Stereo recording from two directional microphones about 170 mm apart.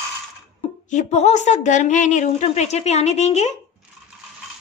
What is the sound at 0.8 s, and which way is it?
A woman's voice, 45° left (ahead or behind).